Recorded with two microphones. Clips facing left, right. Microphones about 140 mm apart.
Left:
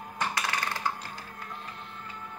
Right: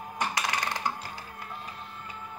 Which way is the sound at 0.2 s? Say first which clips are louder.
Right 1 dB; 20° right (ahead or behind).